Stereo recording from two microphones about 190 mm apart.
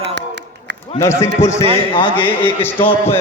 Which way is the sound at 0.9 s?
15° left (ahead or behind).